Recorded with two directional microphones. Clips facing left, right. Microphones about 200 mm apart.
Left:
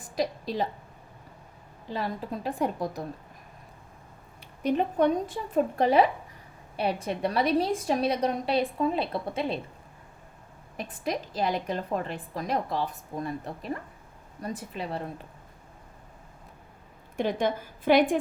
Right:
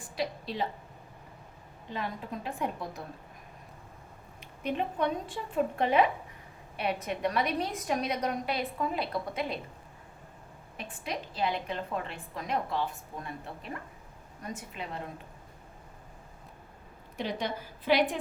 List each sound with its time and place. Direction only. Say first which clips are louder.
0.0 s a woman's voice: left 5 dB; 40° left (ahead or behind)
1.9 s a woman's voice: left 4 dB; 35° left (ahead or behind)
4.6 s a woman's voice: left 7 dB; 40° left (ahead or behind)
10.8 s a woman's voice: left 6 dB; 40° left (ahead or behind)
17.2 s a woman's voice: left 7 dB; 50° left (ahead or behind)